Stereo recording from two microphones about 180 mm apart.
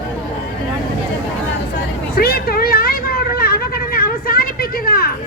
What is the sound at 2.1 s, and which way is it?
Vehicle, 60° left (ahead or behind).